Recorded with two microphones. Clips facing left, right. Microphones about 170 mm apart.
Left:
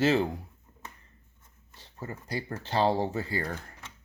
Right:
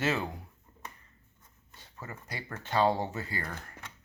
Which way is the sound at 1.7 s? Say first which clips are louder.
Left 5 dB; 30° left (ahead or behind).